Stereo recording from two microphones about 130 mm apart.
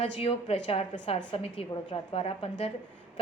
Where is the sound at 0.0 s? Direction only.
50° left (ahead or behind).